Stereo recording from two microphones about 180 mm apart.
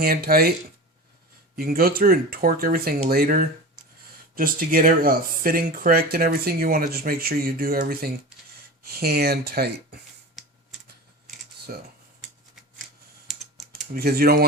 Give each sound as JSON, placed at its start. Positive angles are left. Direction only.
{"t": 0.0, "sound": "speech", "side_deg": -55}
{"t": 1.5, "sound": "speech", "side_deg": -55}
{"t": 11.7, "sound": "speech", "side_deg": -50}
{"t": 13.2, "sound": "typing", "side_deg": 0}
{"t": 13.9, "sound": "speech", "side_deg": -60}